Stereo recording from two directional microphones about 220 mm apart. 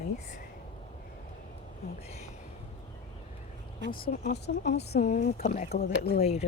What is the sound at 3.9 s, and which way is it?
Speech, 45° left (ahead or behind).